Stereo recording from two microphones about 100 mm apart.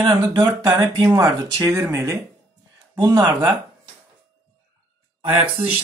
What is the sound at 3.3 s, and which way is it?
Speech, 25° right (ahead or behind).